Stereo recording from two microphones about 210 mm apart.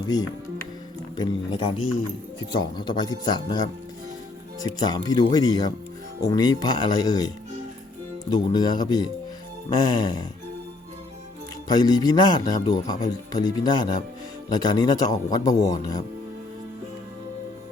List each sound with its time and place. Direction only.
0.0 s speech: 20° left (ahead or behind)
2.7 s speech: 20° left (ahead or behind)
8.5 s speech: 20° left (ahead or behind)
11.7 s a man's voice: 20° left (ahead or behind)